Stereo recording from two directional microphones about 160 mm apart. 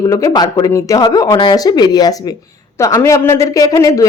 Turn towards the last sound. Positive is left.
turn(degrees=20)  # may be behind; listen again after turning